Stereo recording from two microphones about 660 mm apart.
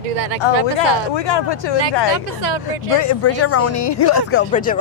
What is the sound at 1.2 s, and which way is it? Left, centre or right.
Speech, left.